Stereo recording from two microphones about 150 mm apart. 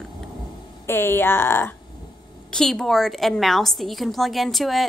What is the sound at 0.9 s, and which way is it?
Speech, 15° left (ahead or behind).